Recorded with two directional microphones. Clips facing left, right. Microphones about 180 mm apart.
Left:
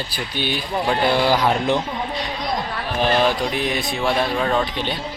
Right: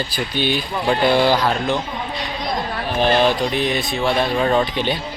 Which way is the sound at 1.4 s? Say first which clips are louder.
Left 1 dB; 20° left (ahead or behind).